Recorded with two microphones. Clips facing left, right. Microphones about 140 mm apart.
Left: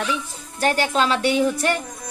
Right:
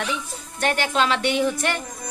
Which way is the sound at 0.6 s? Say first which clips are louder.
Left 3 dB; 35° left (ahead or behind).